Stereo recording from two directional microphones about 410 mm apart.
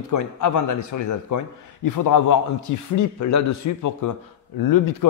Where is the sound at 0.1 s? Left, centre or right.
Left.